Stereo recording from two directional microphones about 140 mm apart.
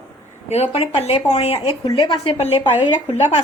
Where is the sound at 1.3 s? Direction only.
45° left (ahead or behind).